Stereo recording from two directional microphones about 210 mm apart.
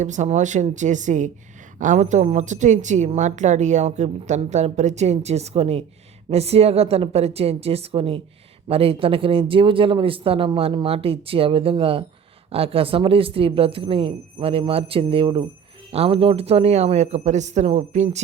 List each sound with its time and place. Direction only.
0.0 s a woman's voice: 35° right (ahead or behind)